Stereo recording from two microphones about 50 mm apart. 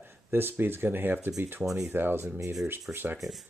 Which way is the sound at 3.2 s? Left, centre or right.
Centre.